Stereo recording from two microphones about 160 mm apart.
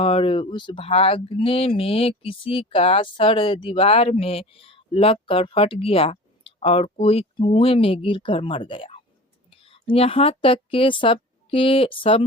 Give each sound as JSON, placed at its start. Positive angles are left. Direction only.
{"t": 0.0, "sound": "a woman's voice", "side_deg": 35}